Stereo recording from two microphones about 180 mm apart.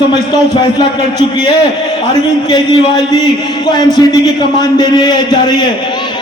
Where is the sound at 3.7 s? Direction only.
20° left (ahead or behind).